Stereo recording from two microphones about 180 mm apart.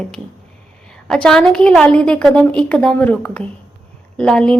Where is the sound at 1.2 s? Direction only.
5° left (ahead or behind).